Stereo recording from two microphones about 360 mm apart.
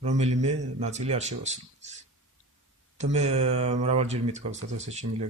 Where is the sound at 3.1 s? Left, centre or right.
Centre.